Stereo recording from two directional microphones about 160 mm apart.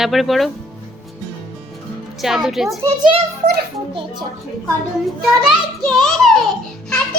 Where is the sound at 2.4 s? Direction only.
Centre (ahead or behind).